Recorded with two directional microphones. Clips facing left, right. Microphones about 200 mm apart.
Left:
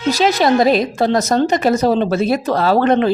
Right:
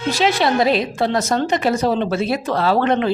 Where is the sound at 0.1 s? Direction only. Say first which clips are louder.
Left 4 dB; 40° left (ahead or behind).